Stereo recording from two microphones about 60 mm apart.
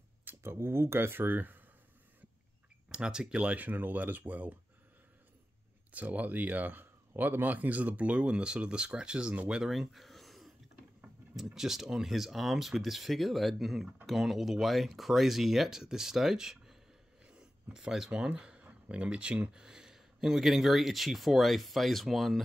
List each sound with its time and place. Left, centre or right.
0.4 s speech: right
2.9 s speech: centre
3.5 s speech: right
5.9 s speech: right
9.7 s a sound: centre
11.3 s speech: centre